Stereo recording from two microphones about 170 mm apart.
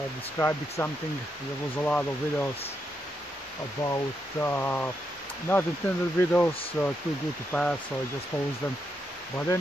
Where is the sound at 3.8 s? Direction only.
20° left (ahead or behind).